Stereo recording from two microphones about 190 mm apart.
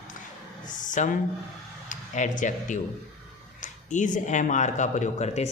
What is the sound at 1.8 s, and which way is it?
A man's voice, 40° left (ahead or behind).